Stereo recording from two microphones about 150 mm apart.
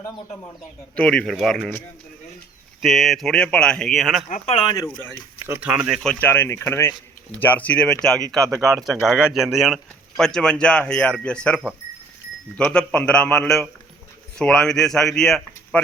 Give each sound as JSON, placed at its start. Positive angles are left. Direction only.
{"t": 0.9, "sound": "speech", "side_deg": 5}
{"t": 2.8, "sound": "speech", "side_deg": 0}
{"t": 4.3, "sound": "speech", "side_deg": 55}
{"t": 4.5, "sound": "speech", "side_deg": 35}
{"t": 5.5, "sound": "speech", "side_deg": -10}
{"t": 6.0, "sound": "a man's voice", "side_deg": 10}